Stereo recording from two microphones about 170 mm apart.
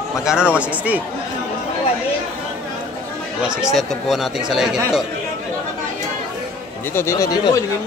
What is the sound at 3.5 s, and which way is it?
Speech, 5° right (ahead or behind).